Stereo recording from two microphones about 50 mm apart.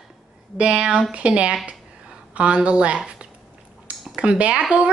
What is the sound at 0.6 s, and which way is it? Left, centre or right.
Speech, right.